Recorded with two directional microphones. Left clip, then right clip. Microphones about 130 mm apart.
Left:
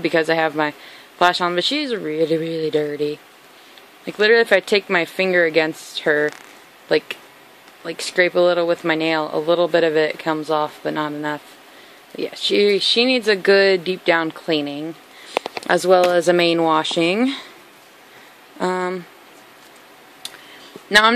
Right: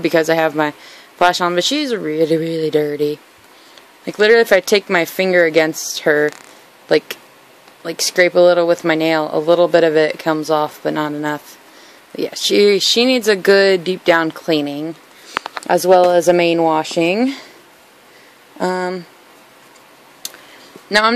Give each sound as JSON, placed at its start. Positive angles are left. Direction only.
{"t": 0.0, "sound": "speech", "side_deg": -20}
{"t": 12.2, "sound": "speech", "side_deg": -30}
{"t": 15.6, "sound": "speech", "side_deg": -5}
{"t": 18.6, "sound": "speech", "side_deg": -5}
{"t": 20.2, "sound": "a sound", "side_deg": -15}